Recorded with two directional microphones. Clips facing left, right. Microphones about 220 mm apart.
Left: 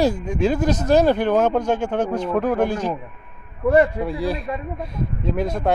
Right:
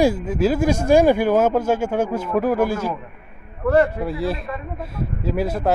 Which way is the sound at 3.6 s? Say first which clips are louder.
Left 1 dB; 10° left (ahead or behind).